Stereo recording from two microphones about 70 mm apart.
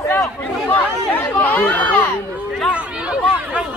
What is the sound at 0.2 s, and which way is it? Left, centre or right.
Chatter, left.